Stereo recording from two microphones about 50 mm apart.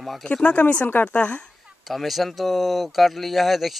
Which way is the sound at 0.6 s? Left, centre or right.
Left.